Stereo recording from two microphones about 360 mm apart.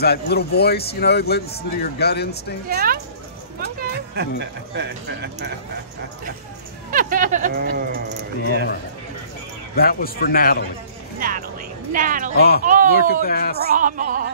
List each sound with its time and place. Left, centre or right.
0.0 s speech: left
2.7 s speech: right
3.5 s a sound: right
4.4 s speech: right
6.9 s speech: right
9.8 s speech: left
11.1 s music: right
11.9 s speech: right
12.4 s speech: left
12.6 s speech: right
13.2 s speech: left
13.6 s speech: right